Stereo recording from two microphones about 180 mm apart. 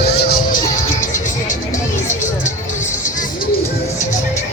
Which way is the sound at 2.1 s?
45° left (ahead or behind).